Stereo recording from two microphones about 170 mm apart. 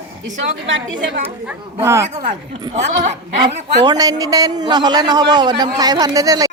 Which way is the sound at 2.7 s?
40° right (ahead or behind).